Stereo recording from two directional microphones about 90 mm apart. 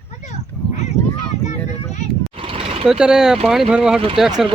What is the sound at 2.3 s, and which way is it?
Vehicle, 90° right.